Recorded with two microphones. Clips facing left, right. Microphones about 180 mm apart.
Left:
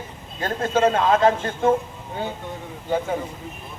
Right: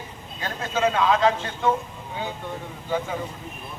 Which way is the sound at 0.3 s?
45° left (ahead or behind).